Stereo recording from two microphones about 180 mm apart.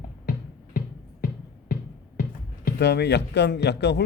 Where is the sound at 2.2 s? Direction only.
65° left (ahead or behind).